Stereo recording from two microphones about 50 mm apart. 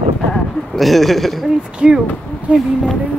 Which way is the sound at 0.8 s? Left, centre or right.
Centre.